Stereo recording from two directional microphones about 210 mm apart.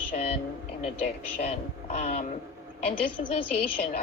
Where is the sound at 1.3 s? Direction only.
30° left (ahead or behind).